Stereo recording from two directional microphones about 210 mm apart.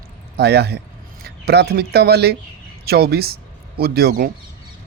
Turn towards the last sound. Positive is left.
turn(degrees=-50)  # may be behind; listen again after turning